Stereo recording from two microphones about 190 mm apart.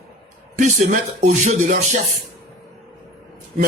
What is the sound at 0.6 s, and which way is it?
Speech, 40° right (ahead or behind).